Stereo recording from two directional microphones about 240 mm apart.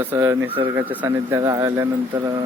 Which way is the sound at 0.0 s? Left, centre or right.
Centre.